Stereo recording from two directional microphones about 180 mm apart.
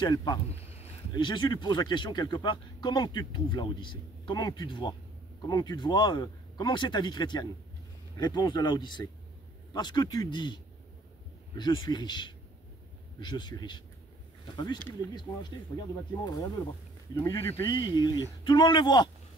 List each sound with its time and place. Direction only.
0.0 s speech: 25° left (ahead or behind)
16.3 s speech: 20° left (ahead or behind)